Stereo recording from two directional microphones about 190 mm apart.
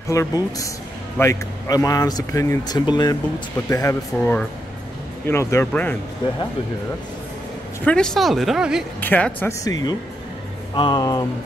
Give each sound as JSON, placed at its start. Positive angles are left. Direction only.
{"t": 0.1, "sound": "speech", "side_deg": 15}
{"t": 7.8, "sound": "speech", "side_deg": 5}
{"t": 9.0, "sound": "speech", "side_deg": 10}